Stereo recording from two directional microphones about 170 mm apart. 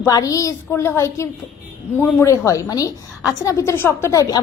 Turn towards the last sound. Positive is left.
turn(degrees=20)  # may be behind; listen again after turning